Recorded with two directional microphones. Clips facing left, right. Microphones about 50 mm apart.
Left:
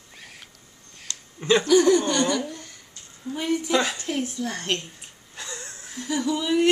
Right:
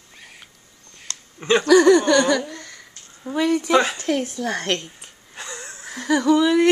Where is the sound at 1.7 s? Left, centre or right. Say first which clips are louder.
Right 7 dB; right.